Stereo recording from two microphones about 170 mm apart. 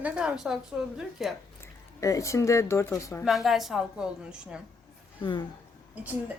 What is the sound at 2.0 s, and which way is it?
Speech, 20° left (ahead or behind).